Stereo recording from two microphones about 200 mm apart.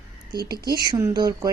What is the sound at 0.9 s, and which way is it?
Speech, 20° right (ahead or behind).